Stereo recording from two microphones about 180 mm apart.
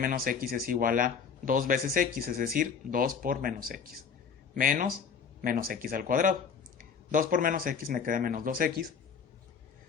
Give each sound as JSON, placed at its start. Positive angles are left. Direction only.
{"t": 0.0, "sound": "speech", "side_deg": -50}